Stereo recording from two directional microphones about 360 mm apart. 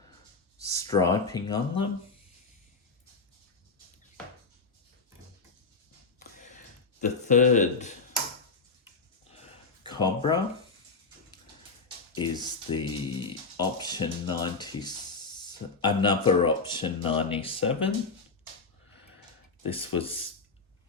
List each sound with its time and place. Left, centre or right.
0.6 s speech: centre
6.1 s a sound: left
7.0 s speech: left
9.4 s a sound: centre
12.1 s speech: centre
19.7 s speech: centre